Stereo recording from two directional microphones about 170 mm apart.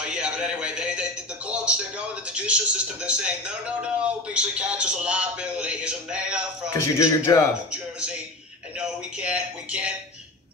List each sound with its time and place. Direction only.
0.0 s music: 5° right (ahead or behind)
2.2 s a man's voice: 5° right (ahead or behind)
6.7 s a man's voice: 20° left (ahead or behind)
7.7 s speech: 5° right (ahead or behind)